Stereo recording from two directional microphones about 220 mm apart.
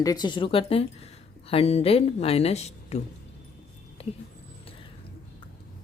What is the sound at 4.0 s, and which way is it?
Speech, 25° left (ahead or behind).